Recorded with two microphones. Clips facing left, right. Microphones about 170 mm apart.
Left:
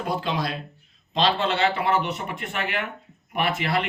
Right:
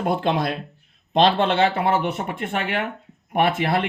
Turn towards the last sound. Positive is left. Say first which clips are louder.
# right 4 dB
turn(degrees=-55)  # may be behind; listen again after turning